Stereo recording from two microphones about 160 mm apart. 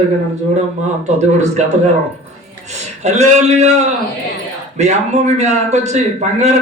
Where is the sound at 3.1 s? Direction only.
45° right (ahead or behind).